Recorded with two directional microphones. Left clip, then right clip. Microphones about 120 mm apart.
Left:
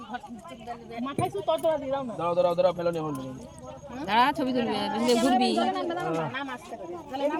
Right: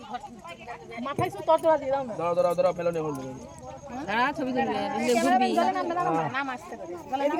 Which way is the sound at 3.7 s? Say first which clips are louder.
Left 3 dB; 5° left (ahead or behind).